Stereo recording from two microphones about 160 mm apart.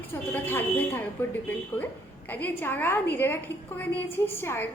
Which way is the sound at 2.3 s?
10° left (ahead or behind).